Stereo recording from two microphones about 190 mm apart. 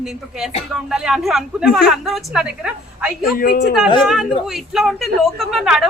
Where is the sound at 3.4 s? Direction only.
55° left (ahead or behind).